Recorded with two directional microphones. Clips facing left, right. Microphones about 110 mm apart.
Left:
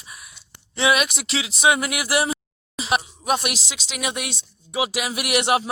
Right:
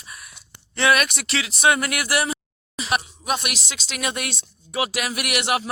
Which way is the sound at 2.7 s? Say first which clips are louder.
Left 2 dB; 25° left (ahead or behind).